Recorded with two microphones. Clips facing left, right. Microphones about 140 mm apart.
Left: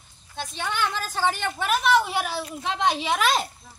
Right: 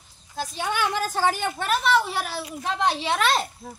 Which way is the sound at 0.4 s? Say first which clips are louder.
Right 2 dB; 5° right (ahead or behind).